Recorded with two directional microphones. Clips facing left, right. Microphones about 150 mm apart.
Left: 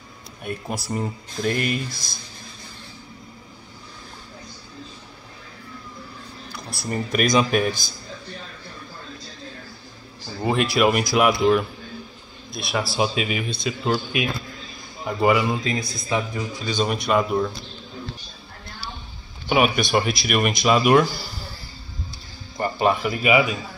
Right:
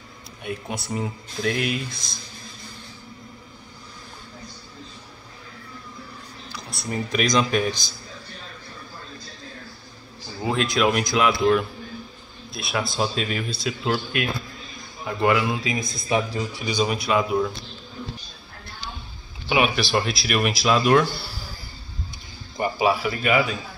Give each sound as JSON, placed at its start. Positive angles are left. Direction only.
{"t": 0.4, "sound": "speech", "side_deg": 0}
{"t": 6.5, "sound": "speech", "side_deg": 0}
{"t": 10.4, "sound": "speech", "side_deg": 5}
{"t": 13.5, "sound": "speech", "side_deg": 0}
{"t": 15.0, "sound": "speech", "side_deg": 5}
{"t": 15.7, "sound": "speech", "side_deg": -20}
{"t": 16.8, "sound": "speech", "side_deg": 0}
{"t": 19.5, "sound": "speech", "side_deg": 0}
{"t": 22.6, "sound": "speech", "side_deg": -5}